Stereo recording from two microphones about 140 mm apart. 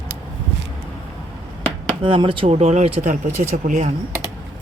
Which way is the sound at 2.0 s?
35° right (ahead or behind).